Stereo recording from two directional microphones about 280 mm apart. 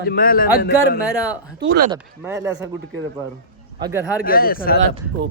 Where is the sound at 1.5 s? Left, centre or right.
Right.